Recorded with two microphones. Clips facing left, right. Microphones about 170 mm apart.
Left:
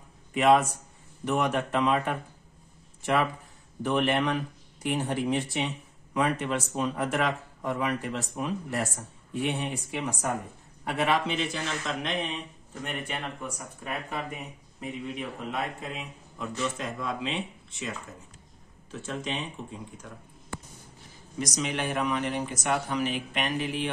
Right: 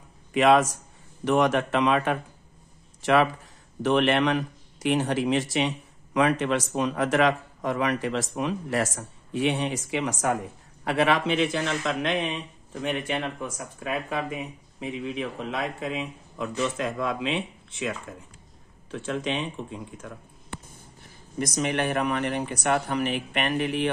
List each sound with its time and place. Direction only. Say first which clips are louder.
0.3 s speech: right 2 dB; 90° right; by 12.2 s 65° right (ahead or behind)
12.8 s speech: right 7 dB; 85° right; by 19.4 s 65° right (ahead or behind)
21.4 s speech: right 4 dB; 55° right (ahead or behind)